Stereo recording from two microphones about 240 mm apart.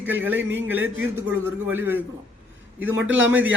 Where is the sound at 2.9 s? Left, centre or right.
Right.